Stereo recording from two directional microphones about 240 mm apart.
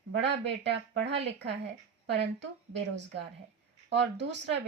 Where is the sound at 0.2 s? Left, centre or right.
Right.